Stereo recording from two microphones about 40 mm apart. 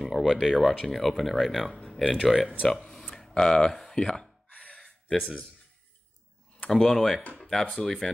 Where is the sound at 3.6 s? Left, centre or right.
Centre.